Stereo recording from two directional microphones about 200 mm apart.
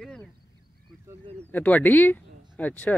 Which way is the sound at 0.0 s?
5° left (ahead or behind).